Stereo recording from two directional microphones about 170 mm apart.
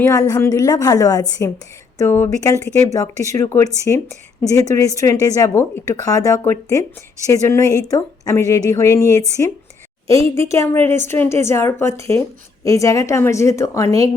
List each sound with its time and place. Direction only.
0.0 s a woman's voice: 20° left (ahead or behind)